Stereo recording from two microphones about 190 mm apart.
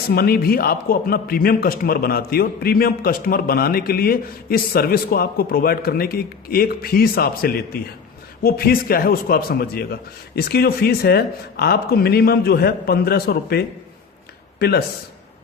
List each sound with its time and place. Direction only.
0.1 s a man's voice: 55° left (ahead or behind)